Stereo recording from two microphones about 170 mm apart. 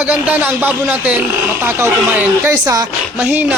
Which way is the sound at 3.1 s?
10° right (ahead or behind).